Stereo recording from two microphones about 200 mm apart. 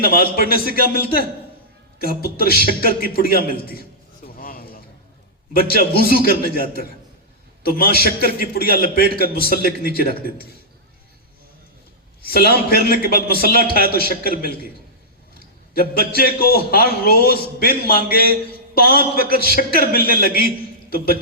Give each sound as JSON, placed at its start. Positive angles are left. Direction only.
{"t": 0.0, "sound": "a man's voice", "side_deg": 50}
{"t": 3.7, "sound": "a sound", "side_deg": 50}
{"t": 5.5, "sound": "a man's voice", "side_deg": 50}
{"t": 8.0, "sound": "a man's voice", "side_deg": -50}
{"t": 8.4, "sound": "a man's voice", "side_deg": 50}
{"t": 12.2, "sound": "a man's voice", "side_deg": 50}
{"t": 15.7, "sound": "a man's voice", "side_deg": 50}